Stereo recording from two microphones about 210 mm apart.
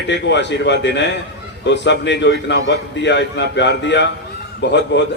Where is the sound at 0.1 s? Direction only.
55° left (ahead or behind).